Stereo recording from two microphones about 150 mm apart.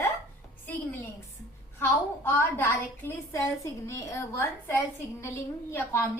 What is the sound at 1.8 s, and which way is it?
A woman's voice, 15° left (ahead or behind).